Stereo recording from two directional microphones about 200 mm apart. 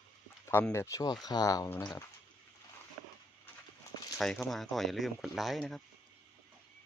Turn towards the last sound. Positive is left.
turn(degrees=0)  # may be behind; listen again after turning